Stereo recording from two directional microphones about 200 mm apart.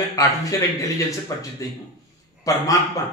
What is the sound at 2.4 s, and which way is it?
Speech, 15° left (ahead or behind).